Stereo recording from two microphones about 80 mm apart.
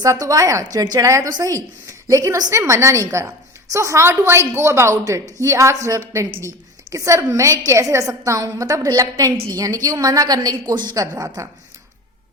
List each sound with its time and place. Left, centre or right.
0.0 s a woman's voice: right
10.9 s a woman's voice: right